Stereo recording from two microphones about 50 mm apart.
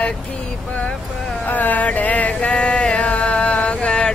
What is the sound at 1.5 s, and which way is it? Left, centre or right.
Chant, left.